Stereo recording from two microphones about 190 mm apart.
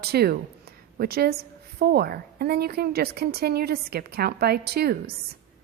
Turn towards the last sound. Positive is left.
turn(degrees=-55)  # may be behind; listen again after turning